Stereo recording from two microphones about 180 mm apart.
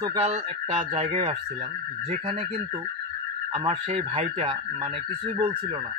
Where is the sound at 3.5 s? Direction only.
30° right (ahead or behind).